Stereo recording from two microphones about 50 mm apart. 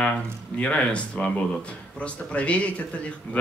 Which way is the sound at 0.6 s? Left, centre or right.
Left.